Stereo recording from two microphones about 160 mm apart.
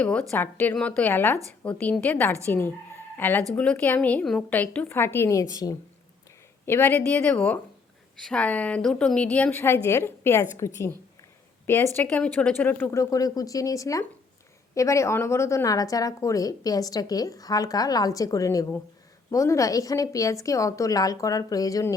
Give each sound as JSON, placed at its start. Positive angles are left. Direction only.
{"t": 0.0, "sound": "a woman's voice", "side_deg": 10}